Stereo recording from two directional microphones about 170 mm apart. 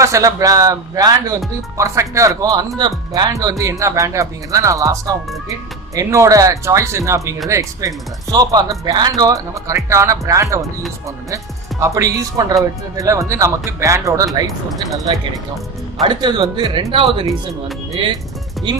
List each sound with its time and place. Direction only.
0.0 s speech: 20° right (ahead or behind)
11.8 s speech: 20° right (ahead or behind)
17.9 s speech: 30° right (ahead or behind)